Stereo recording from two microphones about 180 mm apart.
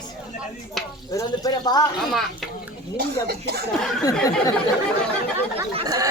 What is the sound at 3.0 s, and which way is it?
Speech, 65° right (ahead or behind).